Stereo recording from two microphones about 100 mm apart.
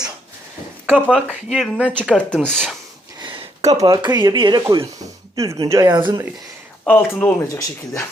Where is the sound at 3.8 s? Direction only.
45° right (ahead or behind).